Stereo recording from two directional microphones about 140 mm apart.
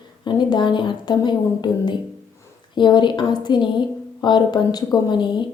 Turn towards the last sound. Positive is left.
turn(degrees=35)  # may be behind; listen again after turning